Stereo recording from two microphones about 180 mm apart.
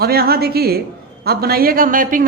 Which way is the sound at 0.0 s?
60° right (ahead or behind).